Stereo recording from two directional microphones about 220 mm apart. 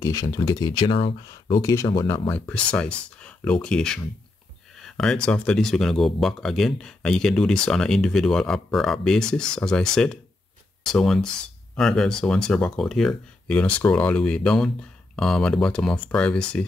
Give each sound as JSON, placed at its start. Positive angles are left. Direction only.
{"t": 0.0, "sound": "speech", "side_deg": 15}
{"t": 2.3, "sound": "speech", "side_deg": 5}